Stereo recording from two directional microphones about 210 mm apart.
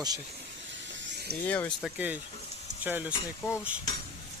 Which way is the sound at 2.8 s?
10° right (ahead or behind).